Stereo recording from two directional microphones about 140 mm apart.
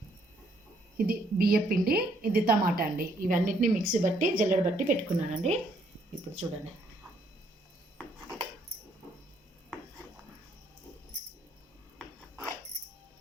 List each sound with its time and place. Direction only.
0.9 s a woman's voice: 90° right; by 5.5 s 55° right (ahead or behind)